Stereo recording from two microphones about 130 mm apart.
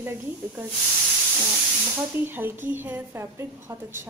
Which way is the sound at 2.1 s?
15° right (ahead or behind).